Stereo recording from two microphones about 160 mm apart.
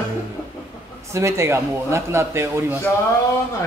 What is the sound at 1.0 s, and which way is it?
Speech, 15° right (ahead or behind).